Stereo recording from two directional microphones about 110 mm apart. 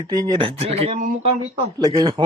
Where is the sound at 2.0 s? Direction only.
40° right (ahead or behind).